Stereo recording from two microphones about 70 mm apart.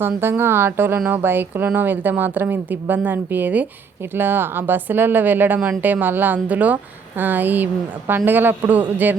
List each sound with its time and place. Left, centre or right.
0.0 s speech: right